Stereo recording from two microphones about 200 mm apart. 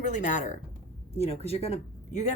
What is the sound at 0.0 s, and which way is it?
Speech, 40° left (ahead or behind).